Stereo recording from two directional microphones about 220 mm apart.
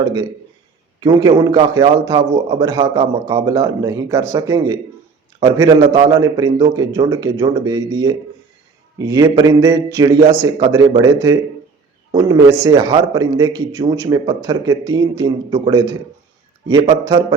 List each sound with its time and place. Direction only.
0.0 s a man's voice: 15° right (ahead or behind)
17.1 s a man's voice: 15° right (ahead or behind)